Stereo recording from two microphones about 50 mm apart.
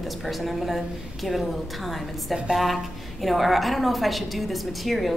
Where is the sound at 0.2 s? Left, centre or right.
Centre.